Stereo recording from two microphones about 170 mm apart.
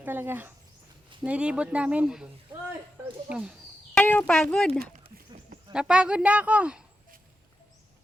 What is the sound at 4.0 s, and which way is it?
Speech, 10° left (ahead or behind).